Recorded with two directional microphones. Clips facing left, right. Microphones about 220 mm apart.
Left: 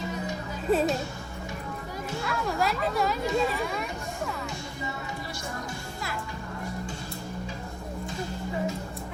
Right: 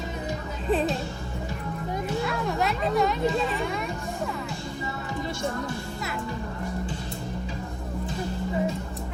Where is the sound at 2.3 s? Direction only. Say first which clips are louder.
Right 1 dB; centre (ahead or behind).